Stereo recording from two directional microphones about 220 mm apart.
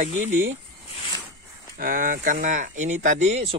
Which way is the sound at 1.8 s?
40° right (ahead or behind).